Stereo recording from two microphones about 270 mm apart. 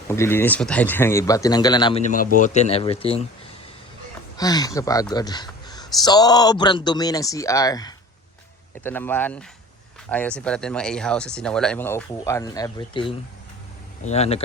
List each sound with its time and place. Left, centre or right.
0.1 s speech: centre
4.4 s speech: centre